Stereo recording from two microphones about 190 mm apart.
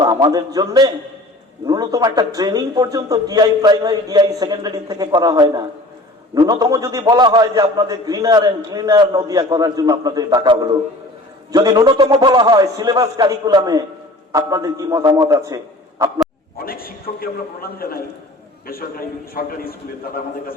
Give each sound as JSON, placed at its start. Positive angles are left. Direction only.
{"t": 0.0, "sound": "a man's voice", "side_deg": -20}
{"t": 16.6, "sound": "a man's voice", "side_deg": 50}